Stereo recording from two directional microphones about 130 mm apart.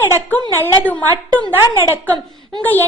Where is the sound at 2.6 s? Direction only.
15° left (ahead or behind).